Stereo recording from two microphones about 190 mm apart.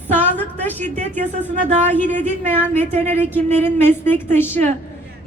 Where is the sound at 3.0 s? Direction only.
10° left (ahead or behind).